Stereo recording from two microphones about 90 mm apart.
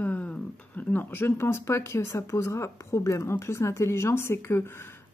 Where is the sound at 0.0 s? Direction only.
15° left (ahead or behind).